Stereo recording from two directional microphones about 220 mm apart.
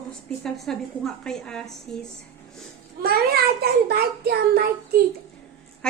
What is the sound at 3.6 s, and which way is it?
A child's voice, 45° right (ahead or behind).